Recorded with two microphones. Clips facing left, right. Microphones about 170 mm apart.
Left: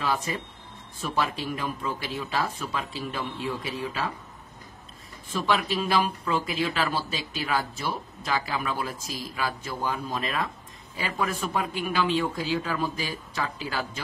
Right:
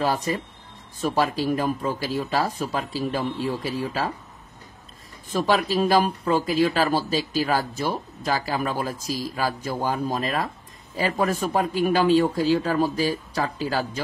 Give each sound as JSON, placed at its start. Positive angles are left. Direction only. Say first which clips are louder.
{"t": 0.0, "sound": "speech", "louder": "right 5 dB", "side_deg": -40}
{"t": 5.3, "sound": "speech", "louder": "right 4 dB", "side_deg": -40}